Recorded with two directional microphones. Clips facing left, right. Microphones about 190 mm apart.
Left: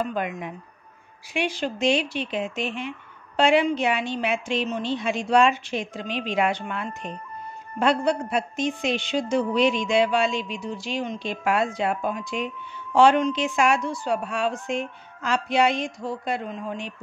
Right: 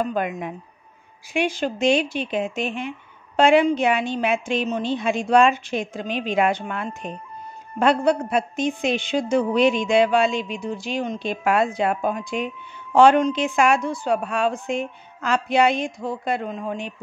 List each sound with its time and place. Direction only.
0.1 s a woman's voice: 50° right (ahead or behind)